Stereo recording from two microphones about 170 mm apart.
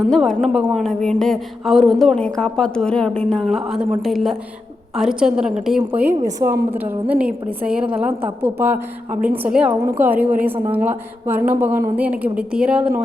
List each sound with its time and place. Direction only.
0.1 s a woman's voice: centre (ahead or behind)